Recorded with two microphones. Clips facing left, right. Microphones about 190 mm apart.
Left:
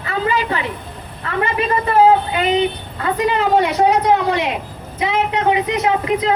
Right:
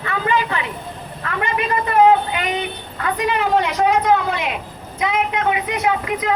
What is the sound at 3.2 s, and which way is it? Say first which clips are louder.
Speech: left 3 dB; 30° left (ahead or behind).